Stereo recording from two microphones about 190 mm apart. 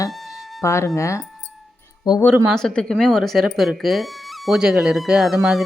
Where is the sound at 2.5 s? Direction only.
5° left (ahead or behind).